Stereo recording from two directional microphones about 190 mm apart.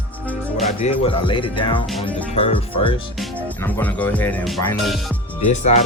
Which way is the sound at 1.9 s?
Centre (ahead or behind).